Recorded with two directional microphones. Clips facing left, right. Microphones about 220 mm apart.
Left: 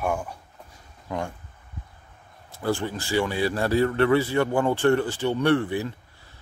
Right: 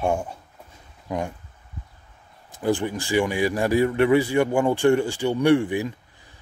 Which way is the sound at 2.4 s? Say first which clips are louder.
Right 3 dB; 15° right (ahead or behind).